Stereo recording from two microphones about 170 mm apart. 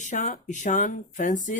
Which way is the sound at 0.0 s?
45° left (ahead or behind).